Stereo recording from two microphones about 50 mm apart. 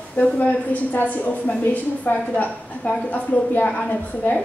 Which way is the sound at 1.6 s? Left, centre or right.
Left.